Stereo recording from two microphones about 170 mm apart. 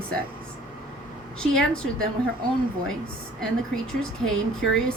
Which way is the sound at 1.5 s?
5° left (ahead or behind).